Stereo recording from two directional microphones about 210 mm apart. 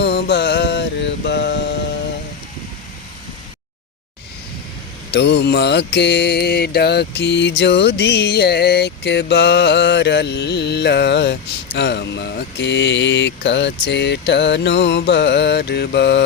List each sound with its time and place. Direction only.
0.0 s music: 50° left (ahead or behind)
5.1 s mantra: 55° left (ahead or behind)